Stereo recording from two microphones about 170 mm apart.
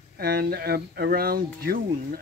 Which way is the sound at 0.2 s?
65° right (ahead or behind).